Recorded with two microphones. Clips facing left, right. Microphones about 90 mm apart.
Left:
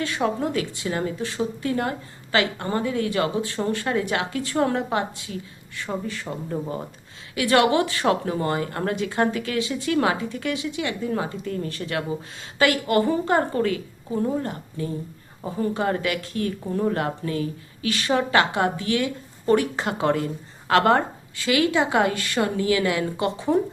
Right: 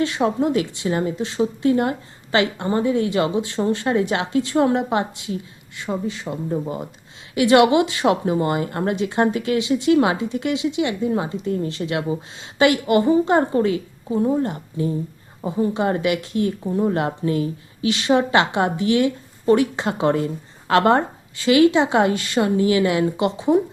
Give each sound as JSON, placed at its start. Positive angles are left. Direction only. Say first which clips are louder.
{"t": 0.0, "sound": "a woman's voice", "louder": "right 5 dB", "side_deg": -25}